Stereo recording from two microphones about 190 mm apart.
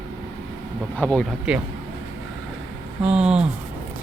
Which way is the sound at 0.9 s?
5° left (ahead or behind).